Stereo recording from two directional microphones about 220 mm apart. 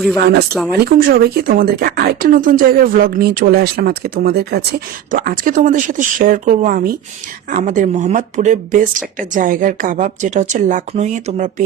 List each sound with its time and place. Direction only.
0.2 s speech: 45° right (ahead or behind)
0.5 s speech: centre (ahead or behind)
0.9 s a woman's voice: 45° right (ahead or behind)